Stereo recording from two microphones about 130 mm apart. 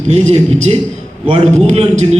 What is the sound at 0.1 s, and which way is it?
A man's voice, 60° right (ahead or behind).